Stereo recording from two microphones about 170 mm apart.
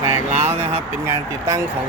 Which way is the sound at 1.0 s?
15° right (ahead or behind).